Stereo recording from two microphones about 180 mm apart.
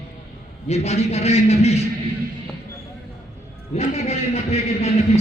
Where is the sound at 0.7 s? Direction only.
35° left (ahead or behind).